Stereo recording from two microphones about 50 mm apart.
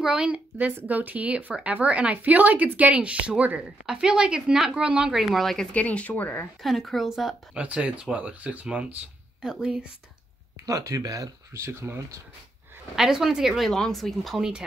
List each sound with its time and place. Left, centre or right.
0.0 s speech: centre
0.8 s a woman's voice: right
3.6 s a woman's voice: centre
5.1 s speech: centre
5.7 s speech: left
6.6 s speech: centre
7.5 s a woman's voice: right
9.4 s speech: centre
10.9 s speech: right
11.5 s speech: right
12.9 s speech: centre
13.7 s speech: centre